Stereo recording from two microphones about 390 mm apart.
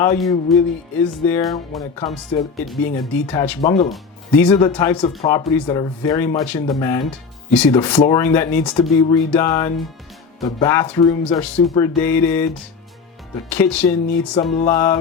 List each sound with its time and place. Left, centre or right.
0.0 s speech: centre
3.6 s speech: centre
3.8 s speech: centre
13.5 s speech: centre